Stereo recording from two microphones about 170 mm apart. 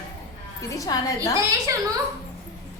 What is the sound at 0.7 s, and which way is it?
Speech, 20° left (ahead or behind).